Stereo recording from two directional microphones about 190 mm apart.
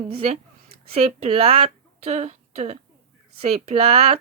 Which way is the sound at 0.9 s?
35° right (ahead or behind).